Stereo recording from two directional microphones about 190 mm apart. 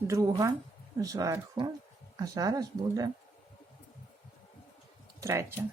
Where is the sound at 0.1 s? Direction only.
15° right (ahead or behind).